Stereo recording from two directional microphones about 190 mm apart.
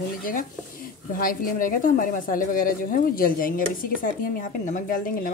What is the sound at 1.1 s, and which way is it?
A woman's voice, 50° left (ahead or behind).